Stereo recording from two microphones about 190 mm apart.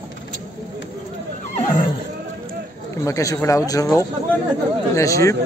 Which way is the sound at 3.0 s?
15° left (ahead or behind).